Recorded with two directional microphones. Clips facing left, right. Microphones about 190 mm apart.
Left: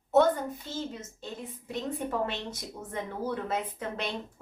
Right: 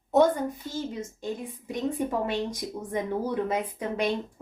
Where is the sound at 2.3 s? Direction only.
15° right (ahead or behind).